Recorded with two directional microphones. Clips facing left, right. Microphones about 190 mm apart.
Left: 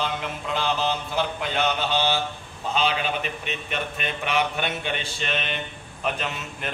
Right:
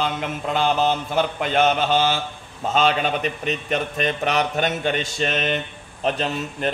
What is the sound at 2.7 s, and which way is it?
Speech, 40° right (ahead or behind).